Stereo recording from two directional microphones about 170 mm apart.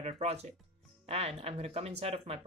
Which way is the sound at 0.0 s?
40° right (ahead or behind).